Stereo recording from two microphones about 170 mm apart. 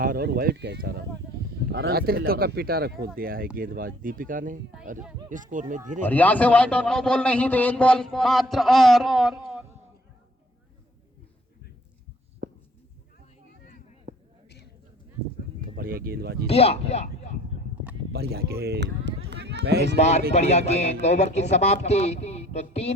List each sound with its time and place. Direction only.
0.0 s speech: 65° right (ahead or behind); by 6.0 s 45° right (ahead or behind)
6.0 s a man's voice: 10° left (ahead or behind)
12.4 s a sound: 65° right (ahead or behind)
14.1 s basketball bounce: 50° right (ahead or behind)
15.7 s speech: 60° right (ahead or behind)
16.5 s speech: 35° left (ahead or behind)
18.1 s speech: 70° right (ahead or behind)
20.0 s speech: 40° left (ahead or behind)